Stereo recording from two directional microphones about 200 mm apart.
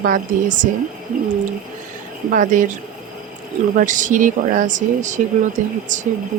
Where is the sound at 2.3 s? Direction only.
40° right (ahead or behind).